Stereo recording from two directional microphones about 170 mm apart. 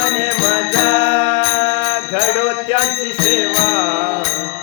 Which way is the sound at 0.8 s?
35° left (ahead or behind).